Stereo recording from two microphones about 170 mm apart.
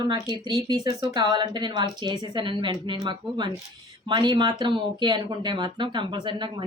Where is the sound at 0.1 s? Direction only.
25° right (ahead or behind).